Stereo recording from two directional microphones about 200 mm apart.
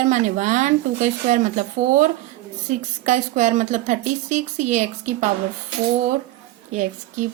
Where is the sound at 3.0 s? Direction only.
35° right (ahead or behind).